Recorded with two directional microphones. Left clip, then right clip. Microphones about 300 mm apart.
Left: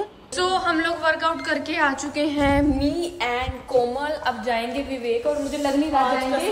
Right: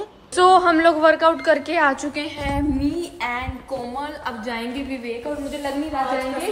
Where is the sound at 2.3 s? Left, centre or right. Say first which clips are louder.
Left 6 dB; left.